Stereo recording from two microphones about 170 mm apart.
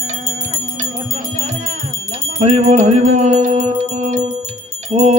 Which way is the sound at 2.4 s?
40° right (ahead or behind).